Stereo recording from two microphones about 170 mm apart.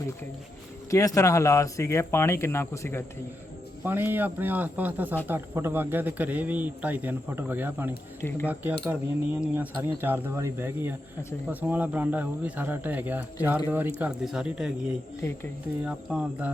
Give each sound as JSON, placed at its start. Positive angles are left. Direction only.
{"t": 0.9, "sound": "speech", "side_deg": 20}
{"t": 3.8, "sound": "a man's voice", "side_deg": -10}